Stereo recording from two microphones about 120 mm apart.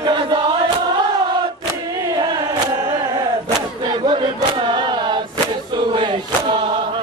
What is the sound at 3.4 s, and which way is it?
Chant, 40° right (ahead or behind).